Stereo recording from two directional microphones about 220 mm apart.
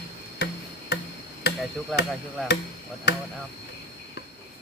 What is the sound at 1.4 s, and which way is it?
Hammer, 50° left (ahead or behind).